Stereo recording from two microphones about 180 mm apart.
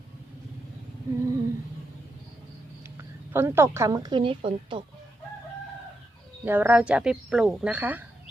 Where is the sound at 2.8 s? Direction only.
15° right (ahead or behind).